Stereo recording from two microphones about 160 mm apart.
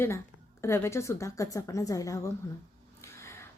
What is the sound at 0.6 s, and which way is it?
A woman's voice, 15° left (ahead or behind).